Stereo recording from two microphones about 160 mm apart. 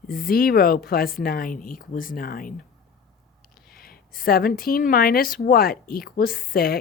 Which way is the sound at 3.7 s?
70° left (ahead or behind).